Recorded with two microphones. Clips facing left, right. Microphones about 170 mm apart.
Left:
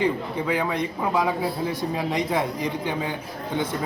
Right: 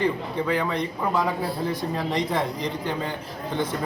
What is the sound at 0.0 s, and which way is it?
A man's voice, 15° left (ahead or behind).